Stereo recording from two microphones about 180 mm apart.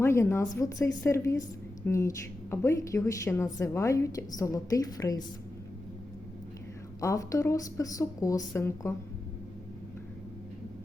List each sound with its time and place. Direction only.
0.0 s a woman's voice: 15° left (ahead or behind)
7.0 s a woman's voice: 15° left (ahead or behind)